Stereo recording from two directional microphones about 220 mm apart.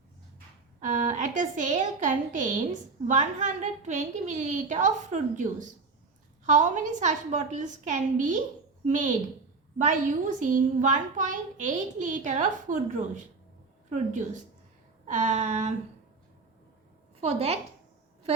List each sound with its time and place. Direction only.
0.8 s a child's voice: 35° right (ahead or behind)
10.4 s a child's voice: 35° right (ahead or behind)
17.2 s a woman's voice: 30° right (ahead or behind)